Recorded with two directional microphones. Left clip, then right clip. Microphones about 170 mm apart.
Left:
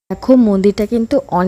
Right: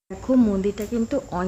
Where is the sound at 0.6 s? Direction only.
50° left (ahead or behind).